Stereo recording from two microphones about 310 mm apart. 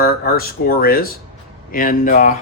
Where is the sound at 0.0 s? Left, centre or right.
Left.